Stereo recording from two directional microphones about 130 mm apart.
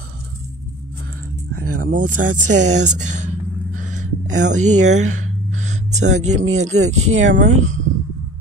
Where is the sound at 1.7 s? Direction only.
90° right; by 7.8 s 70° right (ahead or behind).